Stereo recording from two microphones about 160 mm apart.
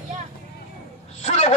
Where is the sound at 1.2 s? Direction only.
45° left (ahead or behind).